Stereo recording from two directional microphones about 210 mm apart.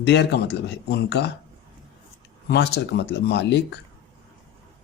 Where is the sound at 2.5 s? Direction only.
50° left (ahead or behind).